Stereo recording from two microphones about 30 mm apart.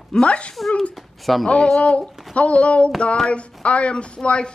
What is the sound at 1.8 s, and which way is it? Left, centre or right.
Speech, left.